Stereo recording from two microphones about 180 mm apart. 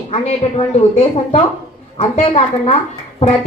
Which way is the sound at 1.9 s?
35° left (ahead or behind).